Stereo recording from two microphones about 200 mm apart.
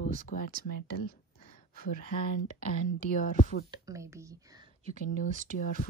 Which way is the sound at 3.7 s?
15° right (ahead or behind).